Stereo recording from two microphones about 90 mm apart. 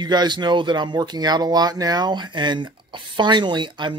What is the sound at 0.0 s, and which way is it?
Speech, 55° right (ahead or behind).